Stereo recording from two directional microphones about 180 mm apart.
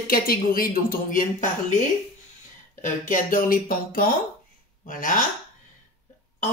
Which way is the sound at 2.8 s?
50° left (ahead or behind).